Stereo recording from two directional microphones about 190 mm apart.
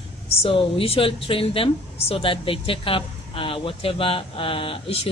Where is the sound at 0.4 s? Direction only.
30° left (ahead or behind).